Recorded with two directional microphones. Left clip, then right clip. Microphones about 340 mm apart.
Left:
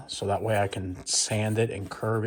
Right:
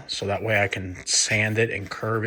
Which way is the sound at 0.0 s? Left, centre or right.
Centre.